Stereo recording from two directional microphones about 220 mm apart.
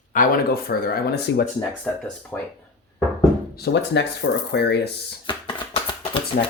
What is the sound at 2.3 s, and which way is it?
Speech, 10° left (ahead or behind).